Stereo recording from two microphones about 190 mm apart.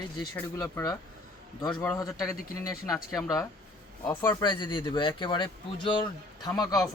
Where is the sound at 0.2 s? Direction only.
20° left (ahead or behind).